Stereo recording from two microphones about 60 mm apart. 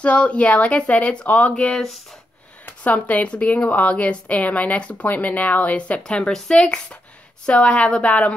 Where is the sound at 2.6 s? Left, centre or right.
Left.